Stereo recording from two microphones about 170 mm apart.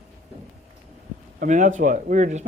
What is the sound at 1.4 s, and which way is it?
Speech, 50° right (ahead or behind).